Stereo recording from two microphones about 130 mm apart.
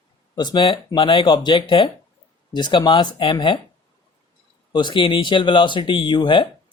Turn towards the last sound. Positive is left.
turn(degrees=35)  # may be behind; listen again after turning